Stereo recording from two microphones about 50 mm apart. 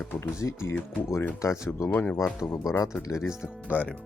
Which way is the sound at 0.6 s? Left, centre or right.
Left.